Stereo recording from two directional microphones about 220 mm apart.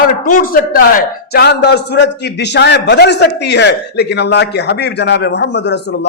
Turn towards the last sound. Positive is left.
turn(degrees=50)  # may be behind; listen again after turning